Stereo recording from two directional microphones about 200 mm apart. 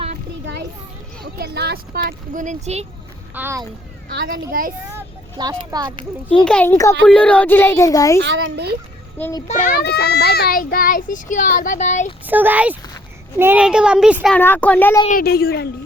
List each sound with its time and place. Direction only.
1.2 s speech: 55° right (ahead or behind); by 2.8 s 35° right (ahead or behind)
3.3 s speech: 10° right (ahead or behind)
4.9 s vehicle: 15° right (ahead or behind)
6.4 s speech: 5° left (ahead or behind)
8.2 s a child's voice: 60° right (ahead or behind)
9.1 s a child's voice: 10° left (ahead or behind)
9.5 s a child's voice: 40° left (ahead or behind)
12.2 s a child's voice: 10° right (ahead or behind)
14.3 s speech: 10° left (ahead or behind)
15.2 s a child's voice: 50° left (ahead or behind)